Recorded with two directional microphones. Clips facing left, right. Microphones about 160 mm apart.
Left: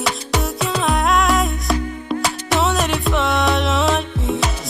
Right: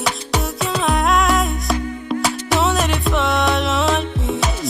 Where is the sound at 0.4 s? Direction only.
Centre (ahead or behind).